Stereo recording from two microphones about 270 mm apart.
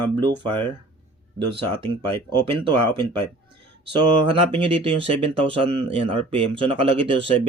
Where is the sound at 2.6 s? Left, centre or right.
Centre.